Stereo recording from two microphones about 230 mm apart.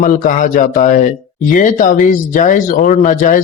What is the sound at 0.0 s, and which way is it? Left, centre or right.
Speech, left.